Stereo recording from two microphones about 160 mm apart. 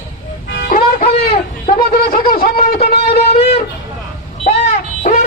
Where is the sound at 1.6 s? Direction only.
65° left (ahead or behind).